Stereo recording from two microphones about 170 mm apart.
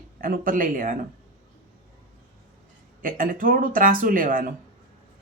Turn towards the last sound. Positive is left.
turn(degrees=-55)  # may be behind; listen again after turning